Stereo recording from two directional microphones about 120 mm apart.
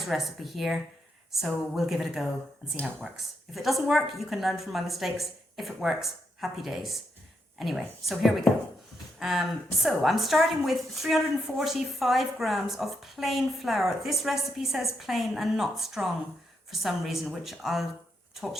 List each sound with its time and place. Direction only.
0.0 s a woman's voice: centre (ahead or behind)
3.5 s a woman's voice: centre (ahead or behind)